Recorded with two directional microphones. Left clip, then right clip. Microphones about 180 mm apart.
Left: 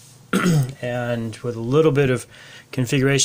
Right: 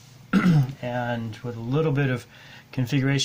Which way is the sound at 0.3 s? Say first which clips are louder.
Left 3 dB; 45° left (ahead or behind).